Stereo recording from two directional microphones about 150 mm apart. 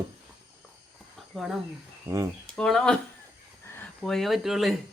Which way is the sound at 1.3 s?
Centre (ahead or behind).